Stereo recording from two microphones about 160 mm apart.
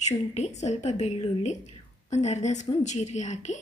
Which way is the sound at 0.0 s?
45° left (ahead or behind).